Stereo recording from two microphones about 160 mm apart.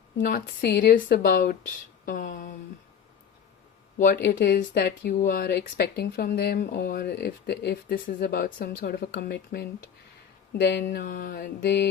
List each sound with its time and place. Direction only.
0.3 s speech: 65° left (ahead or behind)
2.0 s mantra: 55° left (ahead or behind)
3.9 s speech: 75° left (ahead or behind)
4.3 s speech: 60° left (ahead or behind); by 6.6 s 80° left
6.6 s speech: 70° left (ahead or behind)
10.9 s mantra: 60° left (ahead or behind); by 11.9 s 80° left